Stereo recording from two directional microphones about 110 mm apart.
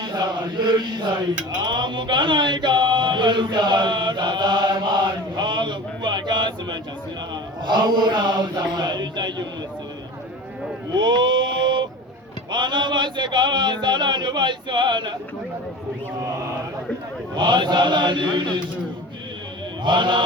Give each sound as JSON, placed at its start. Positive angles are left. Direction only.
{"t": 0.1, "sound": "chant", "side_deg": -40}
{"t": 1.5, "sound": "mantra", "side_deg": -45}
{"t": 5.4, "sound": "a sound", "side_deg": -45}
{"t": 7.6, "sound": "mantra", "side_deg": -40}
{"t": 11.0, "sound": "a sound", "side_deg": -45}
{"t": 12.5, "sound": "mantra", "side_deg": -45}
{"t": 17.3, "sound": "mantra", "side_deg": -45}
{"t": 19.8, "sound": "mantra", "side_deg": -45}